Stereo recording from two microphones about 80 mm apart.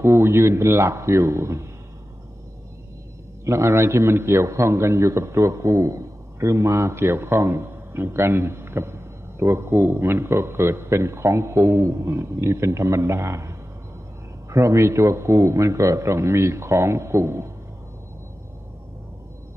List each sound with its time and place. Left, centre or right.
0.0 s a man's voice: right
3.4 s a man's voice: right